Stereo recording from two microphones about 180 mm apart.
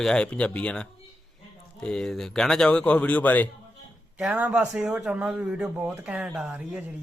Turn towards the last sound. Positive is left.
turn(degrees=-5)  # may be behind; listen again after turning